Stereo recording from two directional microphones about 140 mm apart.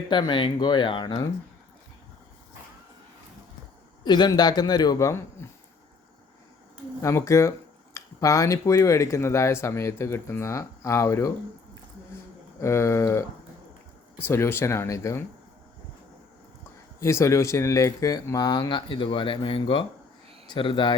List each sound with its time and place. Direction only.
0.1 s speech: 35° left (ahead or behind)
4.0 s speech: 30° left (ahead or behind)
7.0 s speech: 20° left (ahead or behind)
12.5 s speech: 20° left (ahead or behind)
17.0 s speech: 20° left (ahead or behind); by 20.9 s 35° left (ahead or behind)